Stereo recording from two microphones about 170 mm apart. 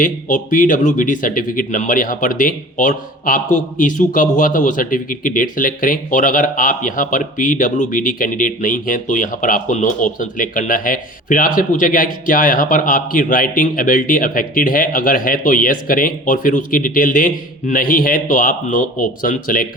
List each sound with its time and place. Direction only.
0.0 s speech: 50° left (ahead or behind)